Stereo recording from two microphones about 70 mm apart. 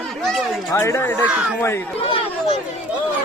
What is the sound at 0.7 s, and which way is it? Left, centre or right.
Speech, left.